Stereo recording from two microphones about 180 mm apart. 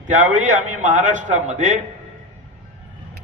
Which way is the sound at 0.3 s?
45° right (ahead or behind).